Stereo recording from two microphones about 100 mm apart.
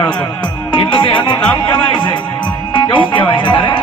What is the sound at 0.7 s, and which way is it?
Music, 55° left (ahead or behind).